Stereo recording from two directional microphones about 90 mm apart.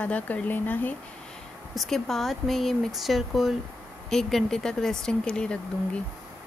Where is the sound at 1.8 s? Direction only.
Centre (ahead or behind).